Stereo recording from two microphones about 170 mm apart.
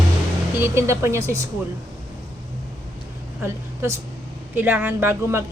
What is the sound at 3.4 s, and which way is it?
Speech, 15° right (ahead or behind).